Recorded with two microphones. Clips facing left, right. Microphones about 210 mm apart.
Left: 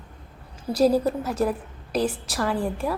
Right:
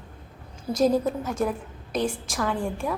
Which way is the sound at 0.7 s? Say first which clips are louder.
Left 2 dB; 30° left (ahead or behind).